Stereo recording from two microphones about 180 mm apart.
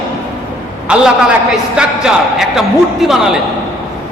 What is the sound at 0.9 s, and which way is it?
Speech, 5° right (ahead or behind).